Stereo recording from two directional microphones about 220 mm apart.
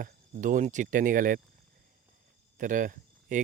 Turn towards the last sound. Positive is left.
turn(degrees=-35)  # may be behind; listen again after turning